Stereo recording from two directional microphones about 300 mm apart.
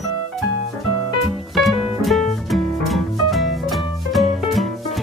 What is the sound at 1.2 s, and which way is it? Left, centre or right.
Music, centre.